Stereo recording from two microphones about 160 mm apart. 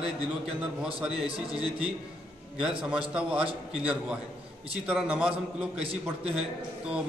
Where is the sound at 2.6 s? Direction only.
5° right (ahead or behind).